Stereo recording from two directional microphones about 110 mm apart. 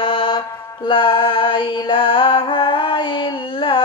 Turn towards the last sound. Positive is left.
turn(degrees=50)  # may be behind; listen again after turning